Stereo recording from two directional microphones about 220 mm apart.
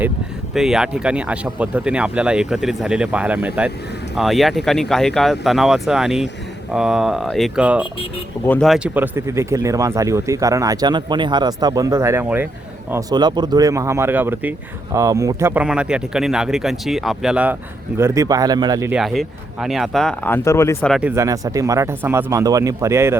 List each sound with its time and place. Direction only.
0.5 s speech: centre (ahead or behind)
18.9 s speech: centre (ahead or behind)
20.9 s speech: 10° right (ahead or behind)